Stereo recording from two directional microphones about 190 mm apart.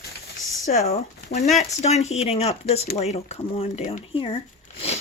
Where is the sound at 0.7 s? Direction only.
35° left (ahead or behind).